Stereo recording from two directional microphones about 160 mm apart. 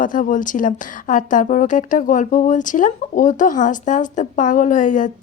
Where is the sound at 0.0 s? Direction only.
55° left (ahead or behind).